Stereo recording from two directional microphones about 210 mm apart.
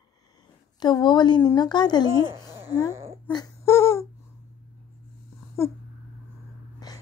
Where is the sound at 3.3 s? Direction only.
15° left (ahead or behind).